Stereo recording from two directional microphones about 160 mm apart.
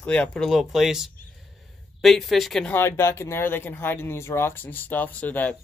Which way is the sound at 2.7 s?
15° left (ahead or behind).